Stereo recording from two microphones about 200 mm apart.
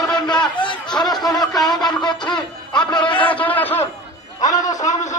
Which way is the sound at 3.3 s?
10° left (ahead or behind).